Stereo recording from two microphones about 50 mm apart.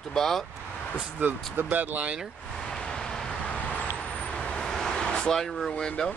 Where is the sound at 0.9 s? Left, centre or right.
Right.